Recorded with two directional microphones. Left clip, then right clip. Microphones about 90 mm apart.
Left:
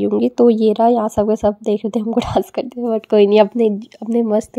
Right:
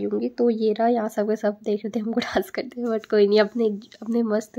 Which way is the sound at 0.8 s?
45° left (ahead or behind).